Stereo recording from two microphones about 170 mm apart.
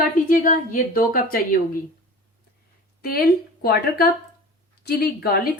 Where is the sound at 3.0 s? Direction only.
60° left (ahead or behind).